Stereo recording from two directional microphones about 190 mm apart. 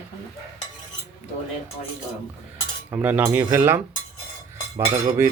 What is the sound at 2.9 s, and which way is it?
Speech, 10° right (ahead or behind).